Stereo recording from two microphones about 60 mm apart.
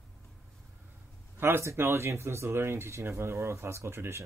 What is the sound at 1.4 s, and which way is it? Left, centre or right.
Speech, right.